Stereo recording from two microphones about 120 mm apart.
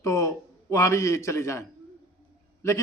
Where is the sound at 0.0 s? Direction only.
25° left (ahead or behind).